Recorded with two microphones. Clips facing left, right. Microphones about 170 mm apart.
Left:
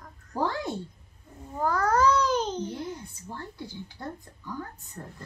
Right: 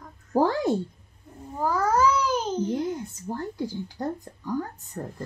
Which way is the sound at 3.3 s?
45° right (ahead or behind).